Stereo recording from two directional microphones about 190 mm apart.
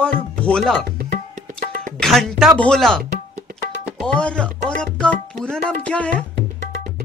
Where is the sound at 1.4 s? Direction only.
40° right (ahead or behind).